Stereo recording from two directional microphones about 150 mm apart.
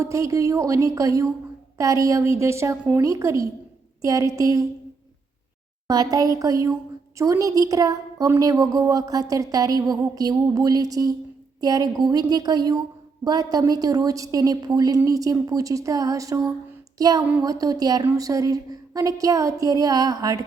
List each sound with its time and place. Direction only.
0.0 s a woman's voice: 20° right (ahead or behind)
5.9 s a woman's voice: 25° right (ahead or behind)